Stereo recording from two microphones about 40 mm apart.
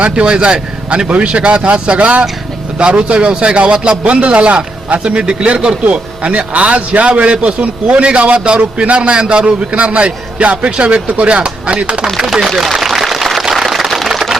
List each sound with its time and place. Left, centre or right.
0.0 s a man's voice: right
12.2 s speech: centre
13.5 s a sound: centre